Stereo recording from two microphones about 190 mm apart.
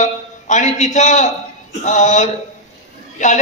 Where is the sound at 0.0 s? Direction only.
40° left (ahead or behind).